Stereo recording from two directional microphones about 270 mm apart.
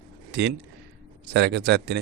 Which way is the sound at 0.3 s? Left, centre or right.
Right.